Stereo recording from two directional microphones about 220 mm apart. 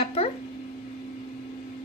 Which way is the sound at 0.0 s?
25° left (ahead or behind).